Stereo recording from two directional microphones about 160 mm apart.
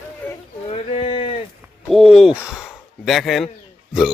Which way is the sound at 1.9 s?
Centre (ahead or behind).